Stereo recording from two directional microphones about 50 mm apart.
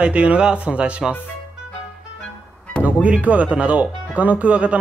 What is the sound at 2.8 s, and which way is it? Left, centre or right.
Speech, right.